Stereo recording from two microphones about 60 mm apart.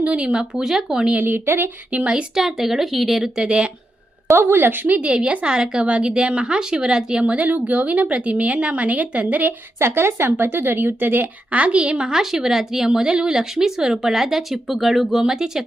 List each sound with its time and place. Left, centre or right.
0.0 s a woman's voice: centre
1.2 s a woman's voice: right
1.9 s speech: centre
2.3 s speech: centre
3.4 s a woman's voice: centre
4.3 s a woman's voice: right
4.9 s speech: centre
9.7 s a woman's voice: right; by 15.6 s centre